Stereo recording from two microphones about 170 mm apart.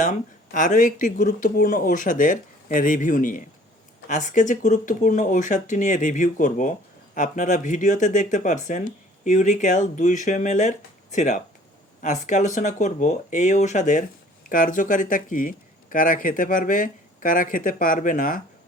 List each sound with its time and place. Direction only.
0.0 s speech: 50° left (ahead or behind)